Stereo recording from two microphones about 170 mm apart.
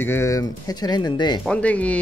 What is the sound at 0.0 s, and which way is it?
Speech, 15° left (ahead or behind).